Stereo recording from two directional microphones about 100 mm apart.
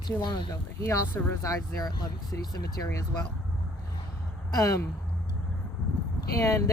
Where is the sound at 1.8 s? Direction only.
40° left (ahead or behind).